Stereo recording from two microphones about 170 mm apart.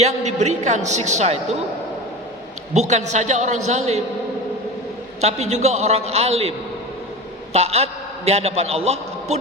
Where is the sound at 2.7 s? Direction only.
45° right (ahead or behind).